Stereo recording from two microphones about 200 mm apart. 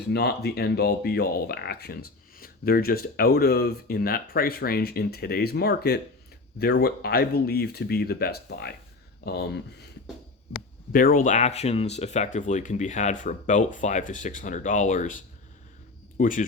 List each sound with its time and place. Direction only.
0.0 s speech: 55° left (ahead or behind)
10.9 s speech: 45° left (ahead or behind)